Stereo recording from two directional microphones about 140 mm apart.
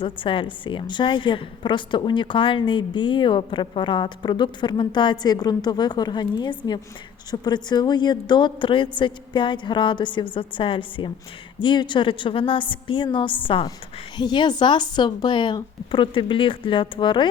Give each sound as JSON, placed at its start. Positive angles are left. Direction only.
{"t": 0.0, "sound": "a woman's voice", "side_deg": 35}